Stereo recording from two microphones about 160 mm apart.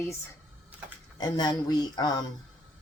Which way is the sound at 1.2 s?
25° left (ahead or behind).